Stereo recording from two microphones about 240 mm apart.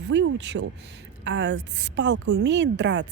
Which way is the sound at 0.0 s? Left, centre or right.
Right.